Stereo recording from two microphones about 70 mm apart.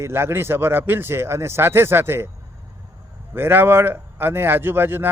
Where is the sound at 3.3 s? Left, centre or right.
Right.